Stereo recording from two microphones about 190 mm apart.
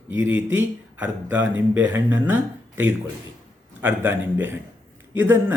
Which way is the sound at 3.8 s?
10° right (ahead or behind).